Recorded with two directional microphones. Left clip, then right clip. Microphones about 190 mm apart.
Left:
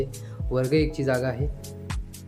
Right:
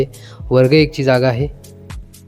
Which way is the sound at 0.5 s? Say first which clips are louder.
Right 12 dB; 45° right (ahead or behind).